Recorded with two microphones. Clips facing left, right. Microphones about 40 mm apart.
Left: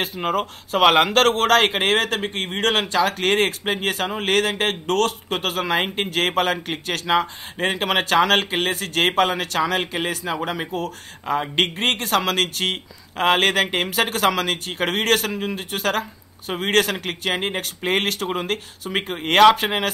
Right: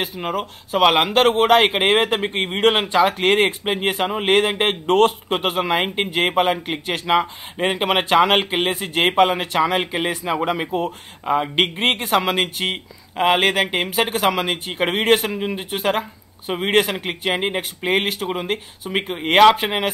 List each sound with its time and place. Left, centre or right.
0.0 s speech: centre